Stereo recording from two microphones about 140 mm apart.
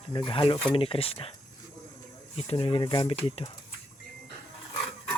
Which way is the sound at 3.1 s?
45° left (ahead or behind).